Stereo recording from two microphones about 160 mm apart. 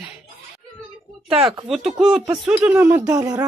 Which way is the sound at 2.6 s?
15° right (ahead or behind).